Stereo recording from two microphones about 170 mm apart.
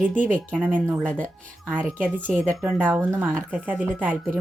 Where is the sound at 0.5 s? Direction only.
10° right (ahead or behind).